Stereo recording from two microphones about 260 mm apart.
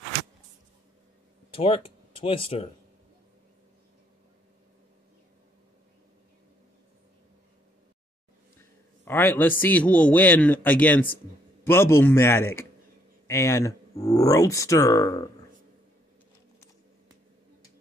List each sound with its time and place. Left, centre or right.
1.5 s speech: left
9.0 s a man's voice: centre